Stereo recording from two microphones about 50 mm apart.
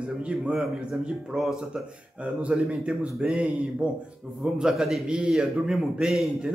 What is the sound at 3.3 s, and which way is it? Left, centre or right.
Speech, right.